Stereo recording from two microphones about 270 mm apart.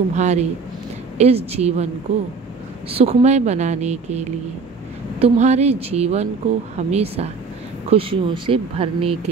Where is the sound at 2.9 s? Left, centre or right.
Right.